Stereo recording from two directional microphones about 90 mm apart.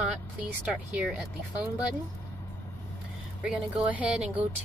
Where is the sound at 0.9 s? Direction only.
15° right (ahead or behind).